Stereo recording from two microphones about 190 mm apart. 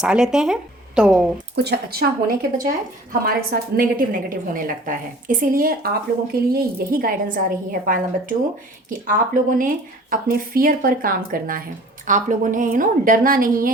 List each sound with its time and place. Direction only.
0.0 s speech: 5° right (ahead or behind)
1.5 s a woman's voice: 60° right (ahead or behind)